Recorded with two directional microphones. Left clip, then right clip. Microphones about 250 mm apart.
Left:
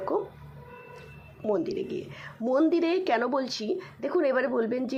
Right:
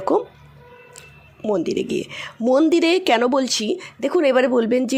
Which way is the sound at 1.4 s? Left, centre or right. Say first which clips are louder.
Right 7 dB; right.